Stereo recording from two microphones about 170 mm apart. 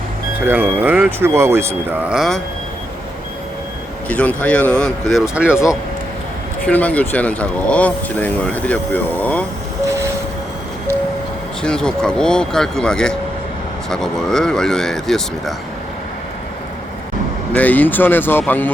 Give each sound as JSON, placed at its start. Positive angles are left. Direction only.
{"t": 0.4, "sound": "speech", "side_deg": -10}
{"t": 4.1, "sound": "speech", "side_deg": 10}
{"t": 6.7, "sound": "speech", "side_deg": 10}
{"t": 11.6, "sound": "speech", "side_deg": 5}
{"t": 17.5, "sound": "speech", "side_deg": 10}